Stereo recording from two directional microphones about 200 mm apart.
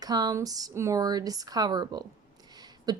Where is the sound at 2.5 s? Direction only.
20° right (ahead or behind).